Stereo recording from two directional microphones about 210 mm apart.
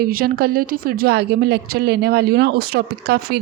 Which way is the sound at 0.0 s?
45° right (ahead or behind).